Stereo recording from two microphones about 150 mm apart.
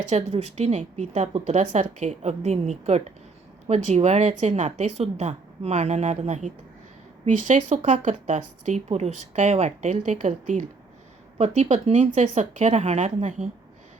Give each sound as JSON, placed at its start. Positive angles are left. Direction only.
{"t": 0.0, "sound": "speech", "side_deg": -50}